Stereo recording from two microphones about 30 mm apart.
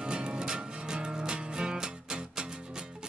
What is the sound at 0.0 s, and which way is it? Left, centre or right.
Music, right.